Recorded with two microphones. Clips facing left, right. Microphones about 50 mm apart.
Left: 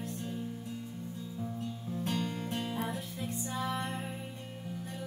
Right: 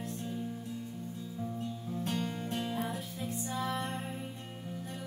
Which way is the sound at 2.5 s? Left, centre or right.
Centre.